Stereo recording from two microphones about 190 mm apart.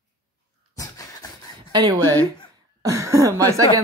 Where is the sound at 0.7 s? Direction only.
20° left (ahead or behind).